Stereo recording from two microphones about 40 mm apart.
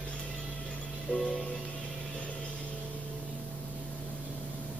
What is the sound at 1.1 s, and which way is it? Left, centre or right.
Music, left.